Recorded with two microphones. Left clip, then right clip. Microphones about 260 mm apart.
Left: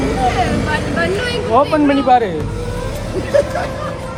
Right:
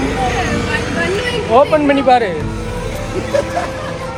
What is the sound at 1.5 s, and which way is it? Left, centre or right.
Speech, right.